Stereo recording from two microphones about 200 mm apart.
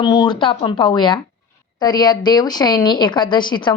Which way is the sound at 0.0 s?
25° left (ahead or behind).